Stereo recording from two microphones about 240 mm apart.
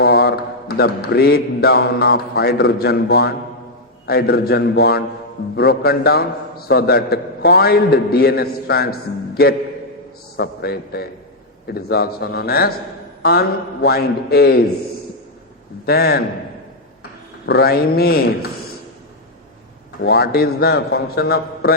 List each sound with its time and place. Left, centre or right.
0.0 s a man's voice: left
15.9 s a man's voice: left
17.4 s a man's voice: left
20.0 s a man's voice: left